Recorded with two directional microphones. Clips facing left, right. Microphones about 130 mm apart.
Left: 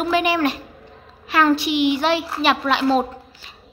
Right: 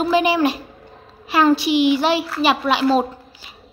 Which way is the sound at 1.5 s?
20° left (ahead or behind).